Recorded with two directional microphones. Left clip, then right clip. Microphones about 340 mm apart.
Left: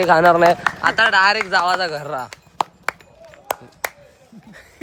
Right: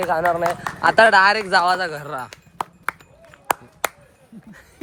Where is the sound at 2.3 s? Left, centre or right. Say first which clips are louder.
Left 6 dB; left.